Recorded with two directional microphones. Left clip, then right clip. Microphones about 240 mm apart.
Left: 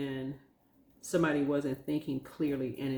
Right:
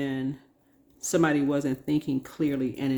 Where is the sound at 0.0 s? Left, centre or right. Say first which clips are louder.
Right 6 dB; right.